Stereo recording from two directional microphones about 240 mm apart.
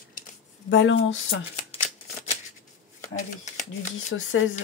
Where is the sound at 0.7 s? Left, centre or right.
Left.